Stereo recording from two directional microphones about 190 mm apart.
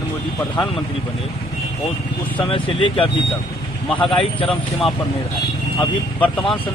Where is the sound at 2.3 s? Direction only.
25° left (ahead or behind).